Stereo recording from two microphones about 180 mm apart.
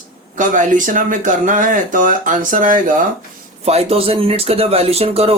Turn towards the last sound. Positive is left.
turn(degrees=-35)  # may be behind; listen again after turning